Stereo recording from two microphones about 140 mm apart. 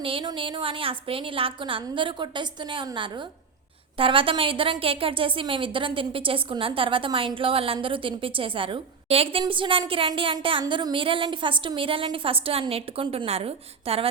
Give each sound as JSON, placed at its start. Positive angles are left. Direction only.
{"t": 0.0, "sound": "a woman's voice", "side_deg": -40}